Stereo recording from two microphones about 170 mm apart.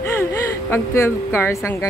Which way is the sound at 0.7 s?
15° left (ahead or behind).